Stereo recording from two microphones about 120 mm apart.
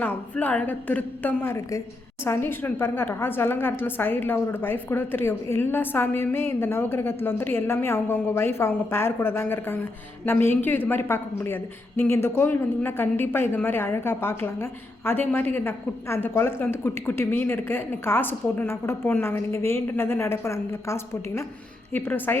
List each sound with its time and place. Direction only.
0.0 s a woman's voice: 10° left (ahead or behind)